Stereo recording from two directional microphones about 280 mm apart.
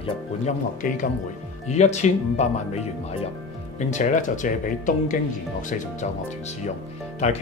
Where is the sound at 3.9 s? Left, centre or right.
Left.